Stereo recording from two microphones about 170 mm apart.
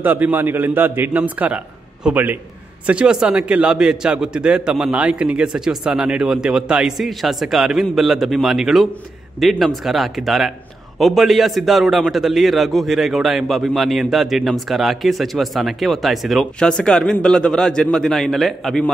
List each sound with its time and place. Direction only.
0.0 s a man's voice: 10° right (ahead or behind)